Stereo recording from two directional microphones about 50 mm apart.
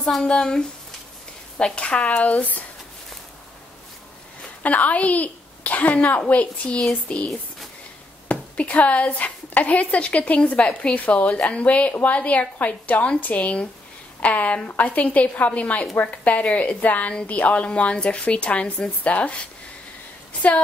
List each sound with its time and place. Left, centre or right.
0.0 s a woman's voice: centre
4.6 s a woman's voice: left
8.3 s a woman's voice: left